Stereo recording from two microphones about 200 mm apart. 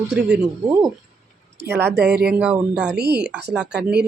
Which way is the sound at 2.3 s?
5° right (ahead or behind).